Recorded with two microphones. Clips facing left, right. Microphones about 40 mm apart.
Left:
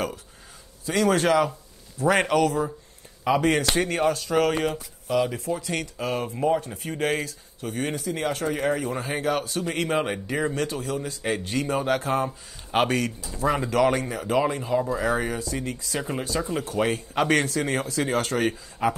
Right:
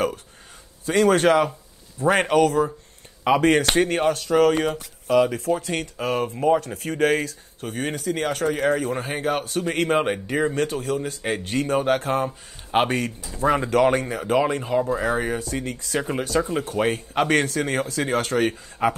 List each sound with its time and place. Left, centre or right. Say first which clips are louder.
0.8 s speech: right 4 dB; right
6.6 s speech: right 5 dB; right
8.9 s speech: right 1 dB; right
12.3 s speech: right 3 dB; right
12.9 s speech: even; right